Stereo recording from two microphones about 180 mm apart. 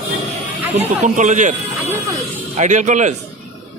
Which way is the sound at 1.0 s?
40° right (ahead or behind).